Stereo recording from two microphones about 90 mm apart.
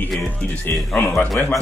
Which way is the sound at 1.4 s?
20° left (ahead or behind).